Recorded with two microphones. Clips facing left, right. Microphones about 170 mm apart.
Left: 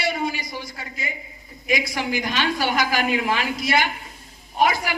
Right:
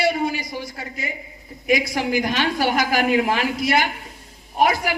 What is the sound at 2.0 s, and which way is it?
A woman's voice, 40° right (ahead or behind).